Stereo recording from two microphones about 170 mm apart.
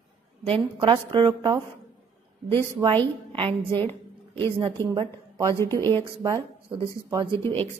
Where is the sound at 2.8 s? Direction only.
30° right (ahead or behind).